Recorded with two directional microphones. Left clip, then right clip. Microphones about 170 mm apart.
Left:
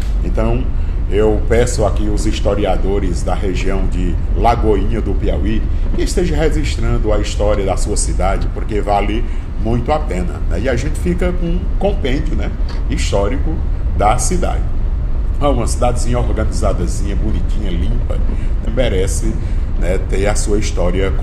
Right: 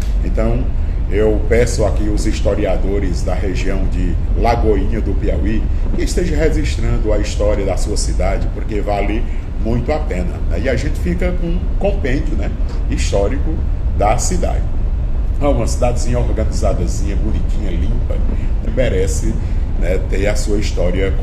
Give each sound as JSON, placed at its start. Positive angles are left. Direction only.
{"t": 1.1, "sound": "a man's voice", "side_deg": 20}
{"t": 18.8, "sound": "a man's voice", "side_deg": 25}